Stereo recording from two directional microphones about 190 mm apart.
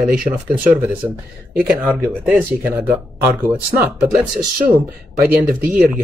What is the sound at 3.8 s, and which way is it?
Speech, centre (ahead or behind).